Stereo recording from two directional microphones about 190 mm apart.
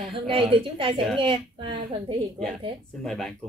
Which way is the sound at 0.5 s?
30° right (ahead or behind).